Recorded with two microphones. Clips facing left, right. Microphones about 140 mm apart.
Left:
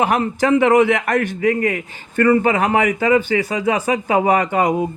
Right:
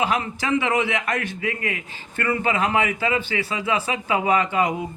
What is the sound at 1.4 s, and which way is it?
Speech, 40° left (ahead or behind).